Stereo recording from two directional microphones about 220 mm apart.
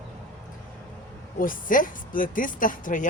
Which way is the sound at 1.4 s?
40° left (ahead or behind).